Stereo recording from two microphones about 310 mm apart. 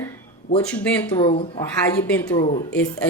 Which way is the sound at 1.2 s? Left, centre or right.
Centre.